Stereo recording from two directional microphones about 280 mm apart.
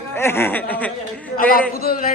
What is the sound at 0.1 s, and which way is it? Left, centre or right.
Speech, centre.